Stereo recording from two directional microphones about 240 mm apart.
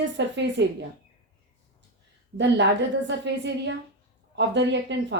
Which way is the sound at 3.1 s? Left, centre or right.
Right.